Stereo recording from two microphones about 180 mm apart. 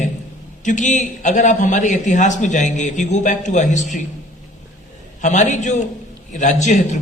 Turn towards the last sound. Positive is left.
turn(degrees=40)  # may be behind; listen again after turning